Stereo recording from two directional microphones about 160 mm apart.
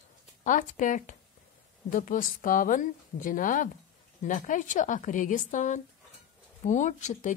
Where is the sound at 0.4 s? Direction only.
55° left (ahead or behind).